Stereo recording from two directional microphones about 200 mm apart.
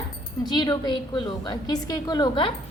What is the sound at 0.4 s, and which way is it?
A woman's voice, 20° left (ahead or behind).